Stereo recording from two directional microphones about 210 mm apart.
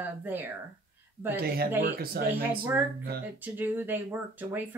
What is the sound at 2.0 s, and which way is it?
Speech, 45° right (ahead or behind).